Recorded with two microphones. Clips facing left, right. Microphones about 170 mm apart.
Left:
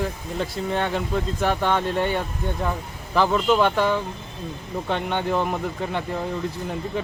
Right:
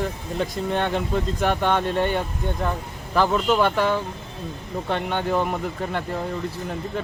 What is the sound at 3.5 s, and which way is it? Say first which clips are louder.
Speech: left 3 dB; 10° right (ahead or behind).